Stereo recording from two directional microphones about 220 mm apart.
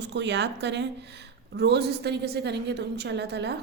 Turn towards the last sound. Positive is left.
turn(degrees=-50)  # may be behind; listen again after turning